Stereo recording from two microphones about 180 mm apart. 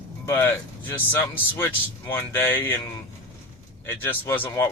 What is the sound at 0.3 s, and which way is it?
Speech, 10° left (ahead or behind).